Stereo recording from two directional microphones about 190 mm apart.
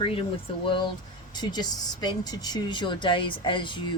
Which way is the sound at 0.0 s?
30° left (ahead or behind).